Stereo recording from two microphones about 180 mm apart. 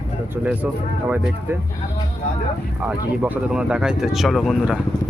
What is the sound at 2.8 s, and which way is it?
Speech, 10° right (ahead or behind).